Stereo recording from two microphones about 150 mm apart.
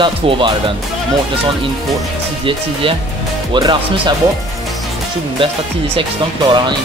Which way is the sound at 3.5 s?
30° right (ahead or behind).